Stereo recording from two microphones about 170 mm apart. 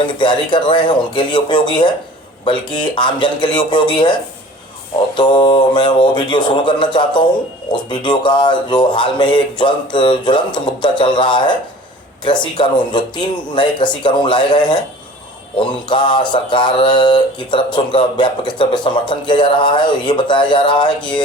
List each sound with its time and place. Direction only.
0.2 s mantra: 25° left (ahead or behind)